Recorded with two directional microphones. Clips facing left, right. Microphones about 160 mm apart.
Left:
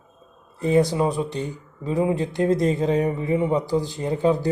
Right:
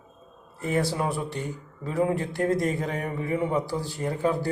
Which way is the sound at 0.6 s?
20° left (ahead or behind).